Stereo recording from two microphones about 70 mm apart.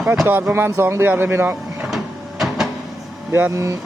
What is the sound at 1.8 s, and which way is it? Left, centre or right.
Printer, centre.